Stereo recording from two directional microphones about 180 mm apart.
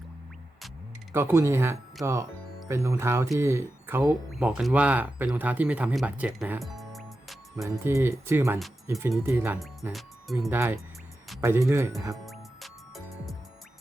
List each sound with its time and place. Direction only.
1.1 s speech: 15° right (ahead or behind)
7.6 s speech: 15° right (ahead or behind)
9.9 s speech: centre (ahead or behind)
10.5 s speech: 10° right (ahead or behind)
12.1 s music: centre (ahead or behind)